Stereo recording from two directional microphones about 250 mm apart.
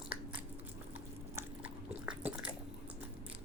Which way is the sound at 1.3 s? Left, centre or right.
Centre.